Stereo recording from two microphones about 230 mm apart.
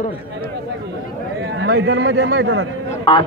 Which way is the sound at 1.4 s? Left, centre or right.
Right.